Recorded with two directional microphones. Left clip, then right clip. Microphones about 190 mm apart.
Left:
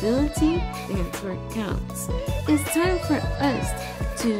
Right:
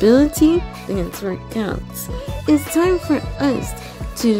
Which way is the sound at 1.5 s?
35° right (ahead or behind).